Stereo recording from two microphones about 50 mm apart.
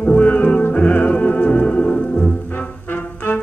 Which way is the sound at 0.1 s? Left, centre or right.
Left.